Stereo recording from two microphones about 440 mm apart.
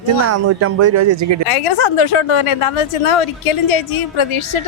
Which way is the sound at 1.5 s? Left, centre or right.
Left.